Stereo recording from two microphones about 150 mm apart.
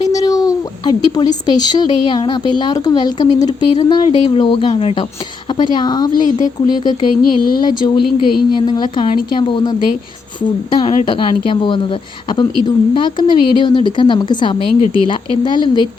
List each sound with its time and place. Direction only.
0.1 s a sound: 25° left (ahead or behind)
1.5 s a woman's voice: 25° left (ahead or behind)
7.2 s speech: 75° left (ahead or behind)
7.6 s a woman's voice: 30° left (ahead or behind)